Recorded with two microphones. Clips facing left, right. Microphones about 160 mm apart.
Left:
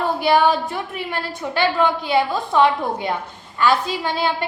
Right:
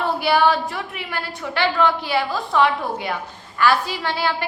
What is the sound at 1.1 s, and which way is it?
A woman's voice, 20° left (ahead or behind).